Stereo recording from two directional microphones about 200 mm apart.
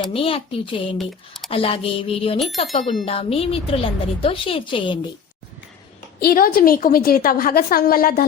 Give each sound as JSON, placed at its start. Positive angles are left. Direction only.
{"t": 0.1, "sound": "a woman's voice", "side_deg": 25}
{"t": 0.9, "sound": "speech", "side_deg": 0}
{"t": 1.5, "sound": "a woman's voice", "side_deg": 30}
{"t": 6.1, "sound": "a woman's voice", "side_deg": 50}